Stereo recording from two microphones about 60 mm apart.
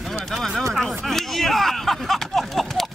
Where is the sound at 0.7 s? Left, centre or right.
Centre.